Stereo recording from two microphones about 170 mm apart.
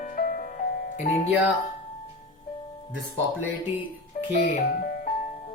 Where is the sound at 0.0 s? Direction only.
50° left (ahead or behind).